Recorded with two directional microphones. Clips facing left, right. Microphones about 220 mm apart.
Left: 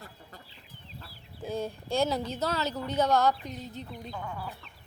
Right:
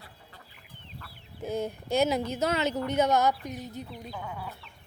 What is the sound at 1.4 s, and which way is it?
Speech, 20° right (ahead or behind).